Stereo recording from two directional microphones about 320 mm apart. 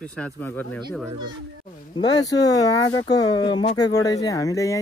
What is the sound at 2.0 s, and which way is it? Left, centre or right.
Speech, centre.